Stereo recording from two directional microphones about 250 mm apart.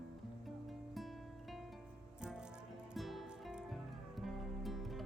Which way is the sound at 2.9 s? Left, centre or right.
Centre.